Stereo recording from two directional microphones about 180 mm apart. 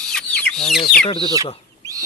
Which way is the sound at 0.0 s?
5° left (ahead or behind).